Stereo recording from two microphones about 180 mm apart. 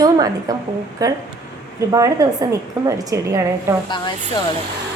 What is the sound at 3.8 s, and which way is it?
Speech, 25° left (ahead or behind).